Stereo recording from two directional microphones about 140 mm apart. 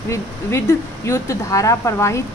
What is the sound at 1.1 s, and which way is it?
A woman's voice, 20° left (ahead or behind).